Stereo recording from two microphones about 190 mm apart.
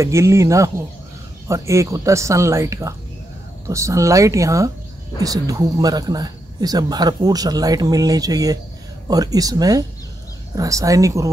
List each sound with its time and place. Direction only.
0.0 s speech: 15° right (ahead or behind)